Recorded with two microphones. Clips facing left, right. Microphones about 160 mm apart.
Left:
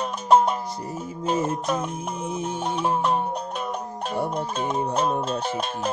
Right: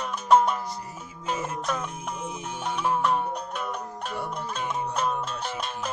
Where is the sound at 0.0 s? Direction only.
25° left (ahead or behind).